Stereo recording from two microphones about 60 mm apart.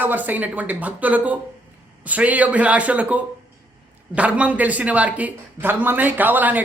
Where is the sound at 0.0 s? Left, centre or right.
Right.